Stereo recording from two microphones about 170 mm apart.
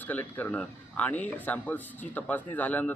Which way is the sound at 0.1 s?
10° left (ahead or behind).